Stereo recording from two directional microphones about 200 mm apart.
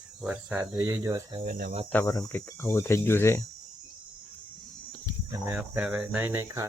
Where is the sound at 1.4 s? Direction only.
45° right (ahead or behind).